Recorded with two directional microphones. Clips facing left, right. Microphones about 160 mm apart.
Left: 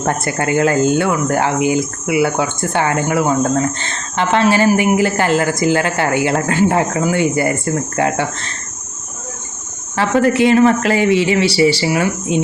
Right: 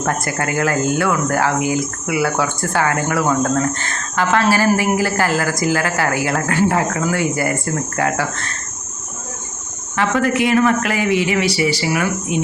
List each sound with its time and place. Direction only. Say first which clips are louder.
0.0 s speech: left 2 dB; 25° left (ahead or behind)
9.9 s speech: left 3 dB; 30° left (ahead or behind)